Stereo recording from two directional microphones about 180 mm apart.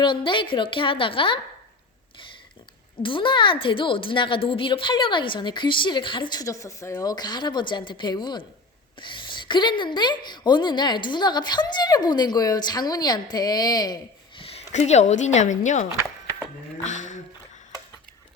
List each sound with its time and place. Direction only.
0.0 s a woman's voice: 25° left (ahead or behind)
3.0 s a woman's voice: 30° left (ahead or behind); by 17.2 s 45° left (ahead or behind)